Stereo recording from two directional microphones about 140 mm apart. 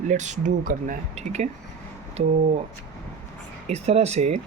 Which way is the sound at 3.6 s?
50° right (ahead or behind).